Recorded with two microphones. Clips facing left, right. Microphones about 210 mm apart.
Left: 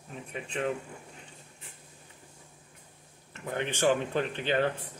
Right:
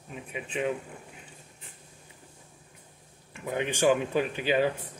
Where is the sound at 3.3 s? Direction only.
15° right (ahead or behind).